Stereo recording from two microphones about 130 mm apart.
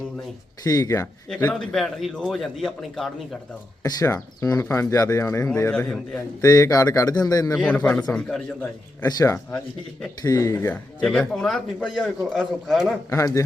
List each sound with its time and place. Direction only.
0.6 s speech: 25° left (ahead or behind)
1.5 s a man's voice: centre (ahead or behind)
3.8 s speech: 25° left (ahead or behind)
7.5 s a man's voice: 5° left (ahead or behind)
9.0 s speech: 25° left (ahead or behind)
11.0 s a man's voice: 5° left (ahead or behind)
13.1 s speech: 25° left (ahead or behind)